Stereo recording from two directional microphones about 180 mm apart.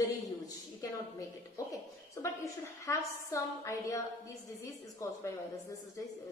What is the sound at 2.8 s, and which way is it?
A woman's voice, 15° left (ahead or behind).